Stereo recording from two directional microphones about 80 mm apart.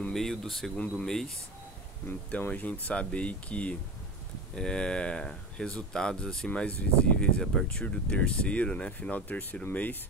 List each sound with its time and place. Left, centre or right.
0.1 s speech: centre
2.0 s speech: left